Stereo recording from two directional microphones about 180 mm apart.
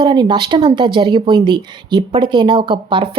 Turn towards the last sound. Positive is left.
turn(degrees=-30)  # may be behind; listen again after turning